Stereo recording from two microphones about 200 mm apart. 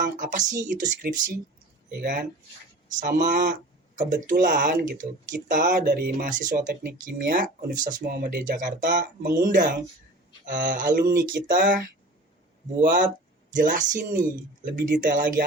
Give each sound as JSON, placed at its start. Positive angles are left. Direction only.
{"t": 0.0, "sound": "speech", "side_deg": -40}
{"t": 13.5, "sound": "speech", "side_deg": -40}